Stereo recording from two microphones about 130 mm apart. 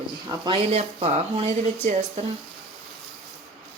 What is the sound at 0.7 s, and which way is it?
Speech, 55° right (ahead or behind).